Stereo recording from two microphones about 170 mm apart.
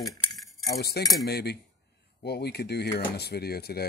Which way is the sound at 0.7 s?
70° left (ahead or behind).